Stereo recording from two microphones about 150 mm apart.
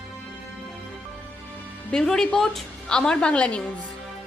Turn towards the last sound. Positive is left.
turn(degrees=5)  # may be behind; listen again after turning